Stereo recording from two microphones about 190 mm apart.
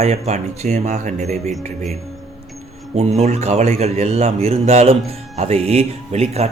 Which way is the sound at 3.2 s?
35° right (ahead or behind).